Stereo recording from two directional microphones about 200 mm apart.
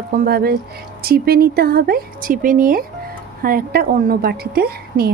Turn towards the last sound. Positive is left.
turn(degrees=-50)  # may be behind; listen again after turning